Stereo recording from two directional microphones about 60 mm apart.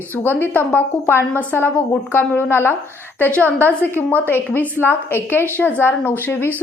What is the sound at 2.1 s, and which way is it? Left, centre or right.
A woman's voice, left.